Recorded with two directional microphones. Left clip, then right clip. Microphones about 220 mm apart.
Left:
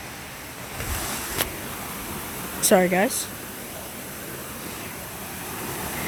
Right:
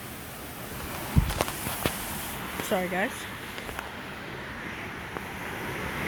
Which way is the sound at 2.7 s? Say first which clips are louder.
Left 9 dB; 45° left (ahead or behind).